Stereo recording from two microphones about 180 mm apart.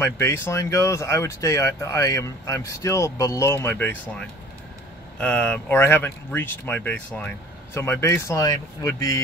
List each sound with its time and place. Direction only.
0.0 s speech: 15° left (ahead or behind)